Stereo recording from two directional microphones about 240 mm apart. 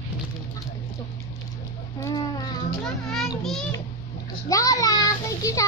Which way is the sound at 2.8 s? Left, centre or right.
Centre.